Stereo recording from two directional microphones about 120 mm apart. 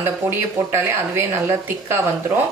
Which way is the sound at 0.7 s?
20° right (ahead or behind).